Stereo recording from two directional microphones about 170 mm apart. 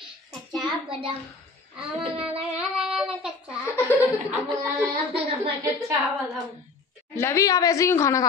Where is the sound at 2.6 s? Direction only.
5° right (ahead or behind).